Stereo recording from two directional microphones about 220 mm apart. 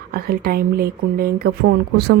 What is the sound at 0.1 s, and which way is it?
A woman's voice, 45° right (ahead or behind).